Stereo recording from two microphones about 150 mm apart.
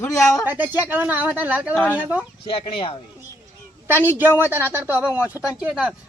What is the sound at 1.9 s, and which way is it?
Speech, 10° right (ahead or behind).